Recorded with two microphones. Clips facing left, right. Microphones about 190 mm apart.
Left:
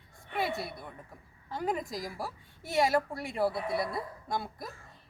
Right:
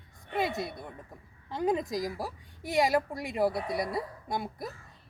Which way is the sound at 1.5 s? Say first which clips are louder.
Right 4 dB; 20° right (ahead or behind).